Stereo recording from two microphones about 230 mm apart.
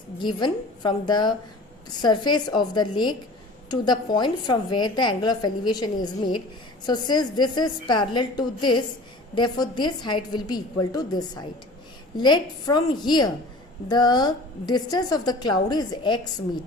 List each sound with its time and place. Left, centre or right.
0.2 s a woman's voice: centre